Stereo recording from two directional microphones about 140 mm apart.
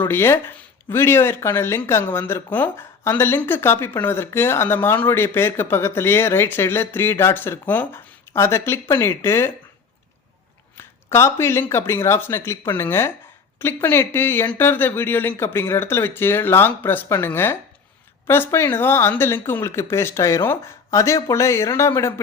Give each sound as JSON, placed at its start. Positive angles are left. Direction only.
{"t": 0.0, "sound": "speech", "side_deg": 15}
{"t": 10.8, "sound": "speech", "side_deg": 20}